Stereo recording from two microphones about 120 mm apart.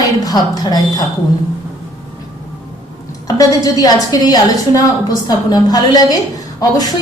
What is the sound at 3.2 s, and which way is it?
A woman's voice, 30° left (ahead or behind).